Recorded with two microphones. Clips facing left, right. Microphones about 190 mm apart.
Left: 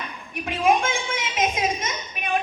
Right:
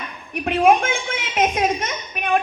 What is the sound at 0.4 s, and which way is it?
A woman's voice, 60° right (ahead or behind).